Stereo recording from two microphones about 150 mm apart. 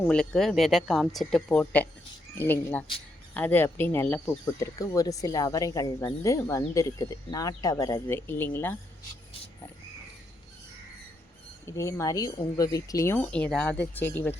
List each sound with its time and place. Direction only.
0.1 s speech: 5° left (ahead or behind)
4.6 s speech: 25° left (ahead or behind)
11.6 s speech: 20° left (ahead or behind)